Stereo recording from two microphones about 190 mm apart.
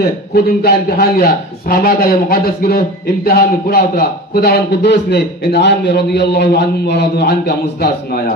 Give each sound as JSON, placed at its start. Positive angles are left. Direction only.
{"t": 0.3, "sound": "a man's voice", "side_deg": 55}